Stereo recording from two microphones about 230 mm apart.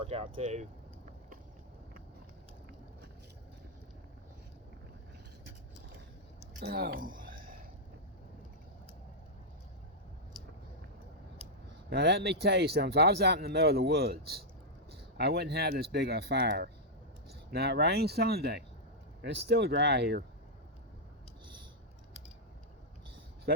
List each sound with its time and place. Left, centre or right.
0.3 s speech: right
6.6 s a sound: right
11.9 s speech: right